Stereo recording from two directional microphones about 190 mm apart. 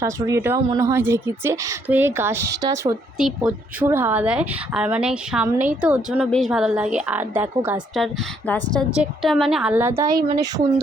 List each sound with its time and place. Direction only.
0.0 s a woman's voice: 15° right (ahead or behind)
3.2 s a woman's voice: 5° right (ahead or behind)
7.9 s a woman's voice: 5° left (ahead or behind); by 10.2 s 15° right (ahead or behind)